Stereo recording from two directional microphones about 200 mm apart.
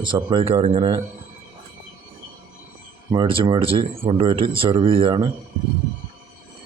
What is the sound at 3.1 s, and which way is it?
Speech, 25° right (ahead or behind).